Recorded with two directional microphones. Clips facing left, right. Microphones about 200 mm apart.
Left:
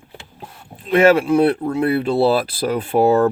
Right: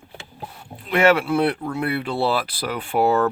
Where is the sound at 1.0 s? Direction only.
35° left (ahead or behind).